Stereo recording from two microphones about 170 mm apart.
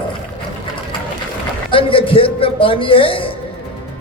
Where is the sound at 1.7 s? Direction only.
30° left (ahead or behind).